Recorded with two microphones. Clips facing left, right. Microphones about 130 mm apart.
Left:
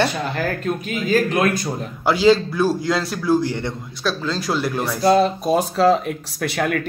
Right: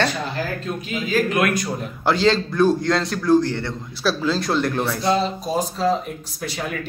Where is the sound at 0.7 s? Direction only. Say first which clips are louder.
Left 4 dB; 55° left (ahead or behind).